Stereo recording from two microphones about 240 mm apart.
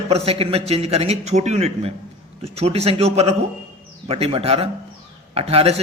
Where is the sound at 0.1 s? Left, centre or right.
Right.